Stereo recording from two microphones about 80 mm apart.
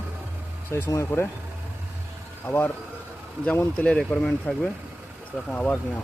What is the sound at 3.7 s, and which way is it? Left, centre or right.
Speech, centre.